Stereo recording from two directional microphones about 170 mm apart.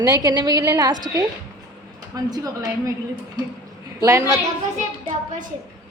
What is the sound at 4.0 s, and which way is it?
Speech, 20° right (ahead or behind).